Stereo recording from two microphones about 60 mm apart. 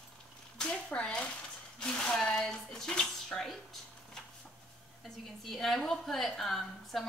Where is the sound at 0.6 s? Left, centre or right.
Centre.